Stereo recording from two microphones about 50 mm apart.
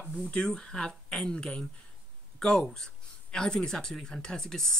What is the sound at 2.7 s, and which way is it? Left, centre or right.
Speech, centre.